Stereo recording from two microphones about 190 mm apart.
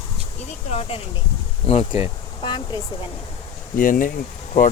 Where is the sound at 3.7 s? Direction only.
45° left (ahead or behind).